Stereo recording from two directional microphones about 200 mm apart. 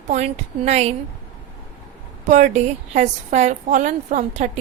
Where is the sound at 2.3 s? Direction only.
35° right (ahead or behind).